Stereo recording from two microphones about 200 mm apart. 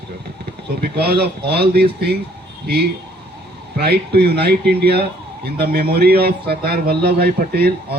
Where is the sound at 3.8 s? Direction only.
55° right (ahead or behind).